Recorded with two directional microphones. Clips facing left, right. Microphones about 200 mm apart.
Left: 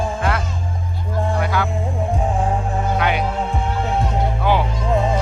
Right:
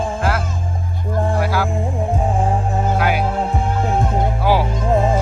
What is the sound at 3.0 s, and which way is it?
Music, 5° right (ahead or behind).